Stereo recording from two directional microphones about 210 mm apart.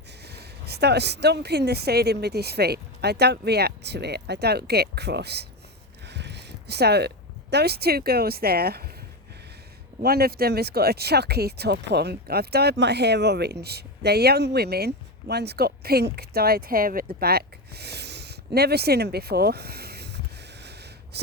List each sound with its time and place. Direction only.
0.3 s speech: 50° right (ahead or behind)
6.1 s a sound: 55° right (ahead or behind)
7.5 s speech: 50° right (ahead or behind)
10.0 s speech: 45° right (ahead or behind)